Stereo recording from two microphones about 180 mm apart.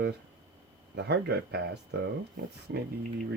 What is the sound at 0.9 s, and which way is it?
Speech, 70° right (ahead or behind).